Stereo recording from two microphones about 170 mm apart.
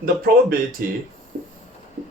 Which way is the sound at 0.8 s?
55° right (ahead or behind).